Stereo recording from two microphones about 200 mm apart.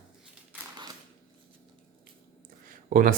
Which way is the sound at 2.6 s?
45° right (ahead or behind).